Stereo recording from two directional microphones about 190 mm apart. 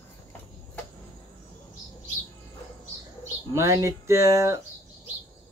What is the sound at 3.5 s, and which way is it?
Speech, 15° right (ahead or behind).